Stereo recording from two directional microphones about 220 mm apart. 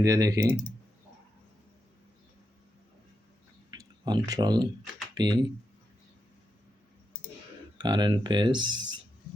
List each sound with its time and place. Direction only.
0.0 s speech: 15° right (ahead or behind)
4.0 s speech: 20° right (ahead or behind)
7.8 s speech: 20° right (ahead or behind)